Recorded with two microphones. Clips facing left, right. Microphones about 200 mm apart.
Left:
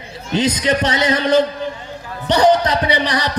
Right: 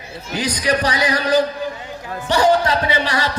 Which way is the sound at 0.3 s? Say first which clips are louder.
Left 3 dB; 25° left (ahead or behind).